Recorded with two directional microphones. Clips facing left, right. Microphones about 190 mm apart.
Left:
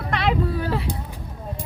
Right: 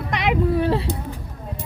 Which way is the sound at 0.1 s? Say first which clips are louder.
Right 3 dB; 15° right (ahead or behind).